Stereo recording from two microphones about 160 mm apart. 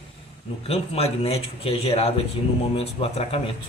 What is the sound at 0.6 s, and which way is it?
A man's voice, 40° left (ahead or behind).